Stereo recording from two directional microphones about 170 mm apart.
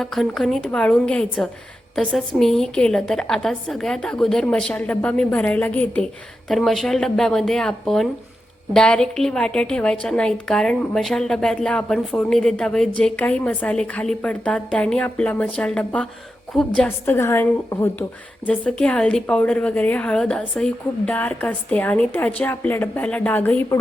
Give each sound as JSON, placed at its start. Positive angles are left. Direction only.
{"t": 0.0, "sound": "a woman's voice", "side_deg": 0}